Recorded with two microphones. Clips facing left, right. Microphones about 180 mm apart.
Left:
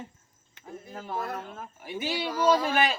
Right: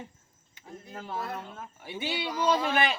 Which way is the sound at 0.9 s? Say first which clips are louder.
Left 2 dB; 50° left (ahead or behind).